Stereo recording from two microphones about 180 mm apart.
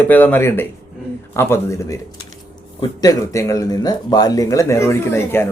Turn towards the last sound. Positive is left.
turn(degrees=10)  # may be behind; listen again after turning